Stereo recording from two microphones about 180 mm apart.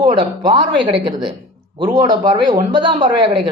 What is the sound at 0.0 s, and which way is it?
Speech, 25° right (ahead or behind).